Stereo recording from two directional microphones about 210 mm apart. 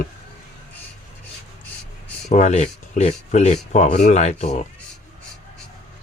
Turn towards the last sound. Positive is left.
turn(degrees=35)  # may be behind; listen again after turning